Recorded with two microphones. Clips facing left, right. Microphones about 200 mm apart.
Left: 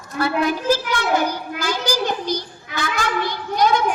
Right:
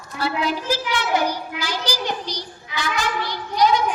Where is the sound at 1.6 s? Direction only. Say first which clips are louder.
Left 7 dB; 50° left (ahead or behind).